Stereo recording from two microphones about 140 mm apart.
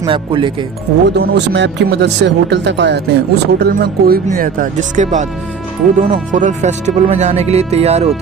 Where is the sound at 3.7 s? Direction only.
90° right; by 8.1 s 50° right (ahead or behind).